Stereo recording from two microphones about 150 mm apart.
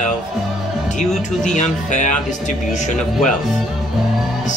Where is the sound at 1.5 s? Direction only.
55° left (ahead or behind).